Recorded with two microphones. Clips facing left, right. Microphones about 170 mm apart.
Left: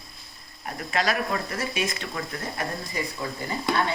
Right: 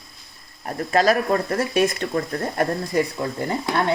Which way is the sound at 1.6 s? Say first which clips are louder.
Right 9 dB; 60° right (ahead or behind).